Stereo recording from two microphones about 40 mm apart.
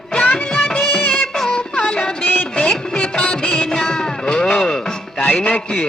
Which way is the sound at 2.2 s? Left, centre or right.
Left.